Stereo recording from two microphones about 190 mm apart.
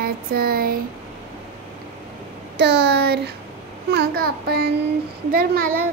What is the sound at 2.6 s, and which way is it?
A child's voice, 60° right (ahead or behind).